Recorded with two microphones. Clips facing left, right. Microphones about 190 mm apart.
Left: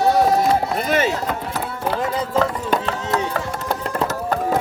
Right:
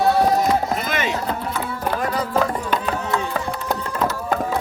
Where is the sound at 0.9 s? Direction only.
40° left (ahead or behind).